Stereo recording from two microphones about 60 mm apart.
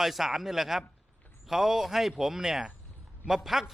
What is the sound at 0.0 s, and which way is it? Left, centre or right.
A man's voice, centre.